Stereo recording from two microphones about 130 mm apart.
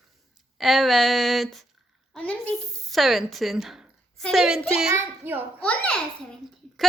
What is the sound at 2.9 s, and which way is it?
A woman's voice, centre (ahead or behind).